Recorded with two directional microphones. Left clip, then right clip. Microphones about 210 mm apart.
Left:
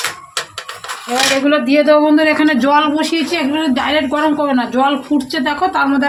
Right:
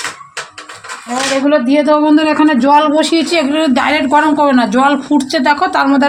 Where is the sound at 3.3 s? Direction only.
50° right (ahead or behind).